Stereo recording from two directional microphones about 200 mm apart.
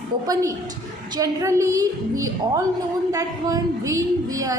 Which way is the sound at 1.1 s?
15° right (ahead or behind).